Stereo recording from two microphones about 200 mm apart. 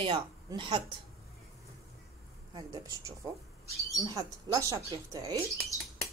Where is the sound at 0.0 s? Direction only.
25° right (ahead or behind).